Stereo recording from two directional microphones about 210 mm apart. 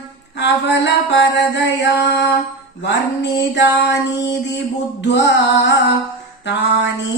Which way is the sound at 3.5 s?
55° left (ahead or behind).